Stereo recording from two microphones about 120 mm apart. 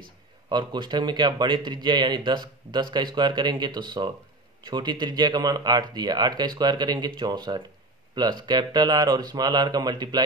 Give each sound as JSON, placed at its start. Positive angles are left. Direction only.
{"t": 0.5, "sound": "a man's voice", "side_deg": -35}